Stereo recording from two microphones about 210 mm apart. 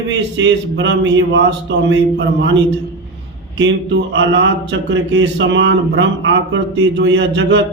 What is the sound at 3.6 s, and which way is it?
A man's voice, 60° right (ahead or behind).